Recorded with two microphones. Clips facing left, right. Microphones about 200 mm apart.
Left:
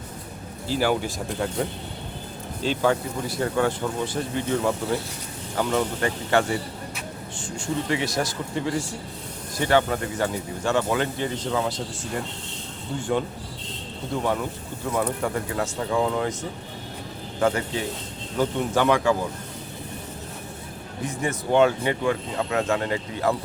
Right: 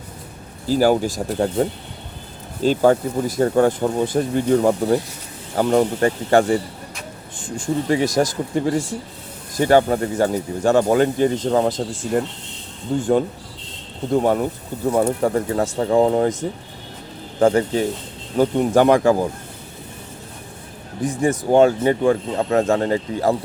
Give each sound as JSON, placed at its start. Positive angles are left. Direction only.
{"t": 0.7, "sound": "speech", "side_deg": -40}
{"t": 2.6, "sound": "speech", "side_deg": -40}
{"t": 7.9, "sound": "speech", "side_deg": -40}
{"t": 12.9, "sound": "speech", "side_deg": -45}
{"t": 14.1, "sound": "speech", "side_deg": -45}
{"t": 14.8, "sound": "speech", "side_deg": -35}
{"t": 17.4, "sound": "speech", "side_deg": -35}
{"t": 18.3, "sound": "speech", "side_deg": -45}
{"t": 21.2, "sound": "speech", "side_deg": -35}